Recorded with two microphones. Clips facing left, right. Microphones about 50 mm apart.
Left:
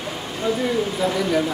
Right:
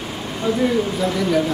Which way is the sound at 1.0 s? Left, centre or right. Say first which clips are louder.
Even; centre.